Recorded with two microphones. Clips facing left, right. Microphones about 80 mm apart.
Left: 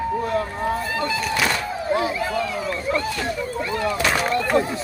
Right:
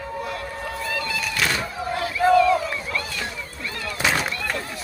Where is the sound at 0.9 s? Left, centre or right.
Left.